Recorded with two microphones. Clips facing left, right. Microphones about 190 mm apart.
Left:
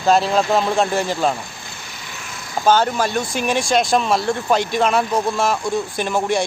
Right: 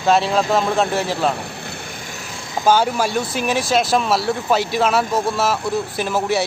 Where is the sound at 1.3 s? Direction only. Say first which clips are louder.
Right 4 dB; 65° right (ahead or behind); by 2.3 s 45° right (ahead or behind).